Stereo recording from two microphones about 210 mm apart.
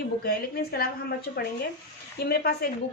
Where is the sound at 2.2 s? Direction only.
50° left (ahead or behind).